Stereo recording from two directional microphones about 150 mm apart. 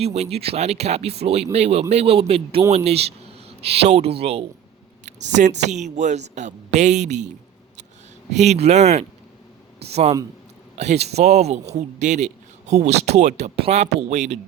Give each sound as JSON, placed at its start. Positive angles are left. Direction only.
{"t": 0.0, "sound": "a man's voice", "side_deg": -45}
{"t": 5.0, "sound": "speech", "side_deg": -50}
{"t": 8.3, "sound": "speech", "side_deg": -50}